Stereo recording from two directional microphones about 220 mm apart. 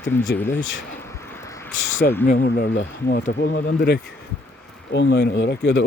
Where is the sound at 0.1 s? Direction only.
10° left (ahead or behind).